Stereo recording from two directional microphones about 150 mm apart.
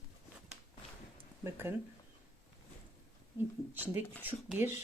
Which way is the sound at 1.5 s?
15° right (ahead or behind).